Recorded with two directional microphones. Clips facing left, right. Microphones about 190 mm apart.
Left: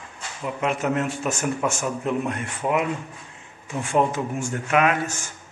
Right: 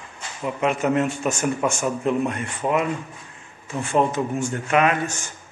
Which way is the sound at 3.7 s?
10° left (ahead or behind).